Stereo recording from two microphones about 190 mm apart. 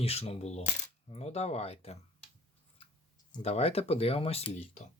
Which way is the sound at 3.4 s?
35° left (ahead or behind).